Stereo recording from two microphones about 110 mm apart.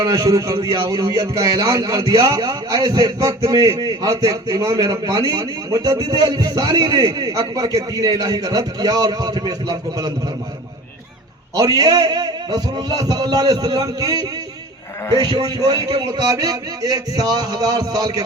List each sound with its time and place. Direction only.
0.0 s a man's voice: 35° right (ahead or behind)
11.5 s a man's voice: 35° right (ahead or behind)